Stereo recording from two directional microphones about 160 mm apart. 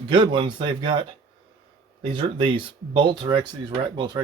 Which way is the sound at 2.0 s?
35° right (ahead or behind).